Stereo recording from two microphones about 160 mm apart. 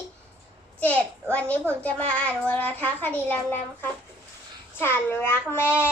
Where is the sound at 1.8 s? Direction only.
10° left (ahead or behind).